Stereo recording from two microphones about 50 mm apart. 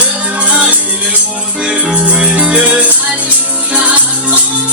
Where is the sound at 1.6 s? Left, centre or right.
Centre.